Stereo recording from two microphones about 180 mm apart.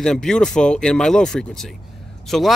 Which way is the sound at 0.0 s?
5° left (ahead or behind).